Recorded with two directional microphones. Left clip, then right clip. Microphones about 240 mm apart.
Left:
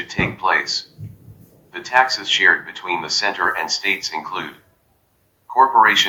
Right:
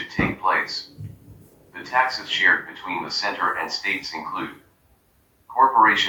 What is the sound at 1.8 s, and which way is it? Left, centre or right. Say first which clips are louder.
Speech: left 5 dB; left.